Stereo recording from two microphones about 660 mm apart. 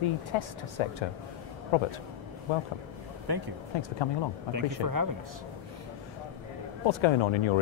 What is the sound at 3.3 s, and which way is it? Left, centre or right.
Speech, right.